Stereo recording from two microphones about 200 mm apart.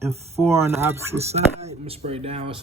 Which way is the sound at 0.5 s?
15° right (ahead or behind).